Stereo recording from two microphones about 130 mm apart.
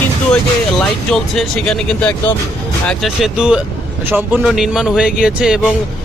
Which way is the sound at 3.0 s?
5° right (ahead or behind).